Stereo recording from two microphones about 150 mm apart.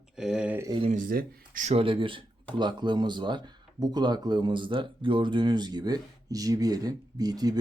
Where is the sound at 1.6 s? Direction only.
40° right (ahead or behind).